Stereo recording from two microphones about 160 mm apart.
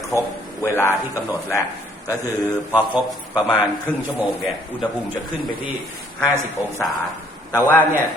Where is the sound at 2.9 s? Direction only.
25° left (ahead or behind).